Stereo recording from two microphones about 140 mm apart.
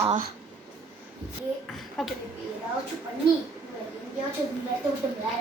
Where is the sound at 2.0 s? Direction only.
Centre (ahead or behind).